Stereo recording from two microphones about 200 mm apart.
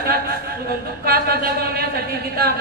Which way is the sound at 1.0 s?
50° right (ahead or behind).